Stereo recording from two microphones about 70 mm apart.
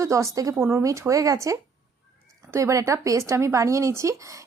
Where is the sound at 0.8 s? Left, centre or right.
Right.